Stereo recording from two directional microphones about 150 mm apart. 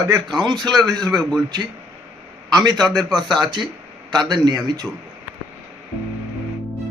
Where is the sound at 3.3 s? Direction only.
30° right (ahead or behind).